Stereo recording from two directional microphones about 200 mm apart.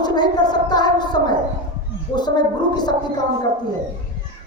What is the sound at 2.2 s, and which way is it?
Speech, 20° left (ahead or behind).